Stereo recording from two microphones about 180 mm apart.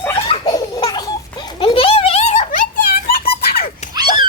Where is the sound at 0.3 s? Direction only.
25° left (ahead or behind); by 3.7 s 60° left (ahead or behind).